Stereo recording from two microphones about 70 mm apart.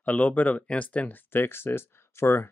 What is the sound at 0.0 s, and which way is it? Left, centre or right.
Speech, left.